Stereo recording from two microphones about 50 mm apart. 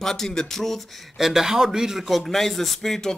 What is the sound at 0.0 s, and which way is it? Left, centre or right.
Speech, centre.